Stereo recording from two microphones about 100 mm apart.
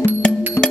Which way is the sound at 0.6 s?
20° left (ahead or behind).